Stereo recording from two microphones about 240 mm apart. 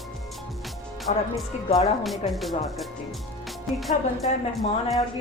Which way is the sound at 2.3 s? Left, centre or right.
Centre.